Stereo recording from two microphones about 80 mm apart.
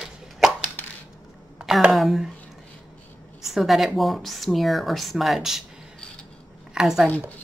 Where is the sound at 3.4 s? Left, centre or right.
Centre.